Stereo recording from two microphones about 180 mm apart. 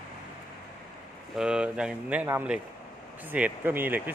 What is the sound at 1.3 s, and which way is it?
Speech, 5° right (ahead or behind).